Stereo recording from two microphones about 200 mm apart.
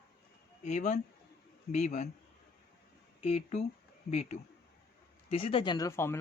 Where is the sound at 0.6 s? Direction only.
35° left (ahead or behind).